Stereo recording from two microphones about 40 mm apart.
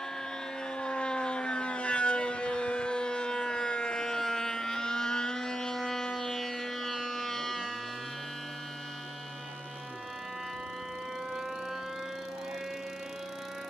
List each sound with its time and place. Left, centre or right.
0.7 s civil defense siren: left; by 7.7 s centre